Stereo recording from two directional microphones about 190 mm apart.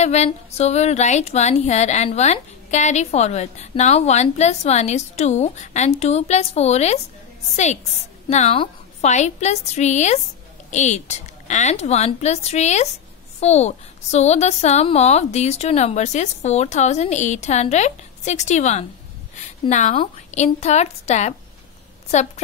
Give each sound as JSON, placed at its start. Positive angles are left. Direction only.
{"t": 0.0, "sound": "speech", "side_deg": 35}
{"t": 19.3, "sound": "a sound", "side_deg": 40}
{"t": 20.0, "sound": "speech", "side_deg": 35}